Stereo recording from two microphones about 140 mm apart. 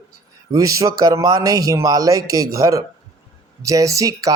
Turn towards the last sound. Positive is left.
turn(degrees=-25)  # may be behind; listen again after turning